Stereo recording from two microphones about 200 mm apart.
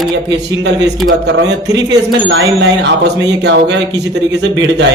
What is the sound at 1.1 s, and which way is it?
A man's voice, 55° right (ahead or behind).